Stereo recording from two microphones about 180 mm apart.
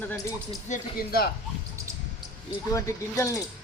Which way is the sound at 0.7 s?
55° left (ahead or behind).